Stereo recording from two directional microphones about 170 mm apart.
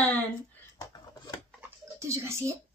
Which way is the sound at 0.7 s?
20° left (ahead or behind).